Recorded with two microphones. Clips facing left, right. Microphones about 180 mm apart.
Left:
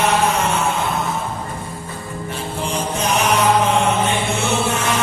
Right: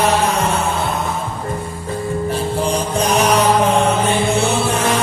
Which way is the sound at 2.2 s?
35° right (ahead or behind).